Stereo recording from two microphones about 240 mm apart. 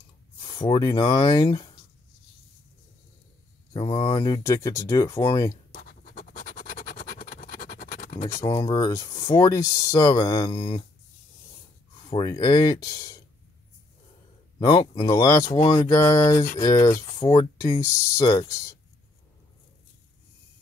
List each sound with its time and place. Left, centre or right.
0.4 s speech: centre
3.7 s speech: left
5.7 s scratch: left
8.4 s speech: centre
12.1 s speech: centre
14.6 s speech: centre